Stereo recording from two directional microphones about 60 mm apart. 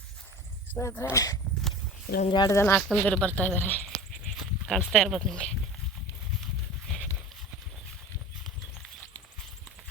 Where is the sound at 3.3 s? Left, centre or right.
Left.